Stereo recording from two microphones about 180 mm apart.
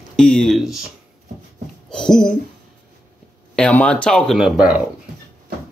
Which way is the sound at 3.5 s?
5° left (ahead or behind).